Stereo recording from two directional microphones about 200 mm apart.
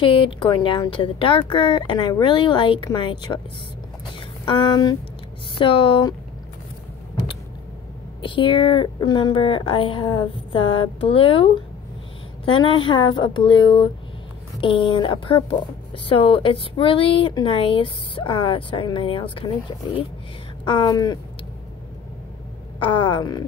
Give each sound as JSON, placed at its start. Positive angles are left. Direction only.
{"t": 0.0, "sound": "speech", "side_deg": 25}
{"t": 4.5, "sound": "speech", "side_deg": 25}
{"t": 8.2, "sound": "speech", "side_deg": 25}
{"t": 22.8, "sound": "speech", "side_deg": 25}